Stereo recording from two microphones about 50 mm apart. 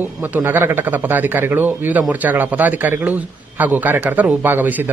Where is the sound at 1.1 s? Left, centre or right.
Right.